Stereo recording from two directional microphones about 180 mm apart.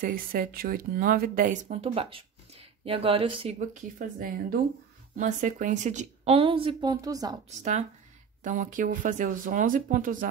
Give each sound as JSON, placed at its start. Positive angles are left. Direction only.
{"t": 0.0, "sound": "a woman's voice", "side_deg": -50}
{"t": 3.5, "sound": "a woman's voice", "side_deg": -50}
{"t": 8.5, "sound": "speech", "side_deg": -45}